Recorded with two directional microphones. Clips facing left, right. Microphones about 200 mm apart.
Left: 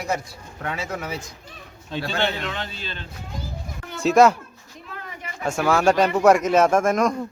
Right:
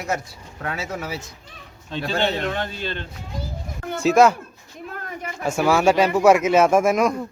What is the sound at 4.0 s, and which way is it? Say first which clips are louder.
Speech: even; centre (ahead or behind).